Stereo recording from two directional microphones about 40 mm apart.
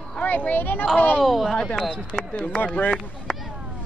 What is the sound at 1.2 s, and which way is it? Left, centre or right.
Speech, centre.